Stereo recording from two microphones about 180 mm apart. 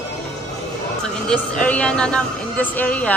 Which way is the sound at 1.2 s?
5° left (ahead or behind).